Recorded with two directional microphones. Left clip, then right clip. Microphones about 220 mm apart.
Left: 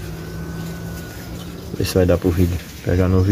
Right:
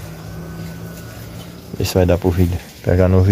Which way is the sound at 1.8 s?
35° right (ahead or behind).